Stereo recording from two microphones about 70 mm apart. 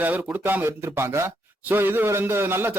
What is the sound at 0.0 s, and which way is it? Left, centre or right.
A man's voice, right.